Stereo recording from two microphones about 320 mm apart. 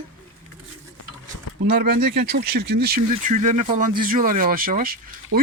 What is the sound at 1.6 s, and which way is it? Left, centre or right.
Speech, right.